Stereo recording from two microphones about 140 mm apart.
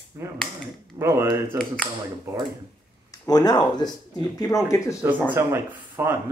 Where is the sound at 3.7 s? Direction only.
30° left (ahead or behind).